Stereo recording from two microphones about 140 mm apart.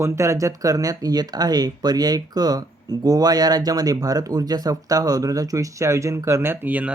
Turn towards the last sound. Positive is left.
turn(degrees=-10)  # may be behind; listen again after turning